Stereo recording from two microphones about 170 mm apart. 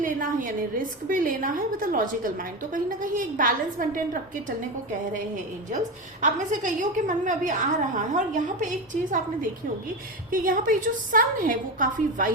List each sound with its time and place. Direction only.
0.0 s a woman's voice: 50° right (ahead or behind)
6.2 s a woman's voice: 45° right (ahead or behind)